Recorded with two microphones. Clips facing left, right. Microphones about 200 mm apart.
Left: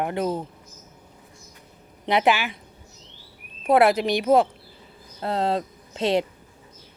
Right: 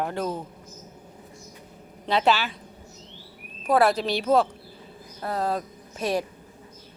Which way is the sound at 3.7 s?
20° left (ahead or behind).